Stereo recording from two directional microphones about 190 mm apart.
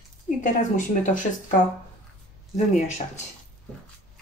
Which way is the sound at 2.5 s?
40° left (ahead or behind).